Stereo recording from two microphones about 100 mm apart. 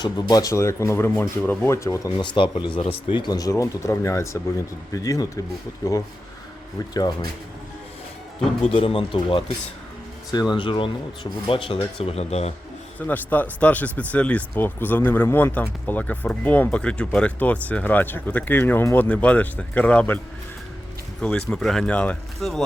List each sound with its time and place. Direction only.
0.0 s speech: 40° left (ahead or behind)
2.1 s speech: 50° left (ahead or behind); by 5.3 s 35° left (ahead or behind)
6.9 s speech: 40° left (ahead or behind)
8.6 s speech: 75° left (ahead or behind)
10.5 s speech: 55° left (ahead or behind); by 12.5 s 90° left
13.1 s speech: 15° left (ahead or behind)
21.2 s speech: 10° left (ahead or behind)
22.4 s speech: centre (ahead or behind)